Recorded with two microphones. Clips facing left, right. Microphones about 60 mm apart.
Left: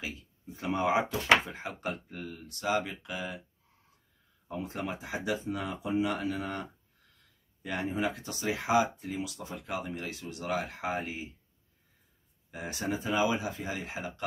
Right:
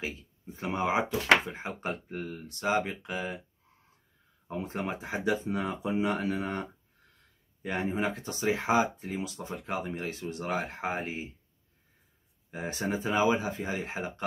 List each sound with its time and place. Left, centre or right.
0.0 s speech: right
4.5 s speech: right
12.4 s speech: right